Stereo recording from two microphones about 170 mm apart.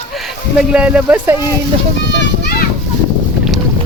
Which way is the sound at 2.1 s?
90° left.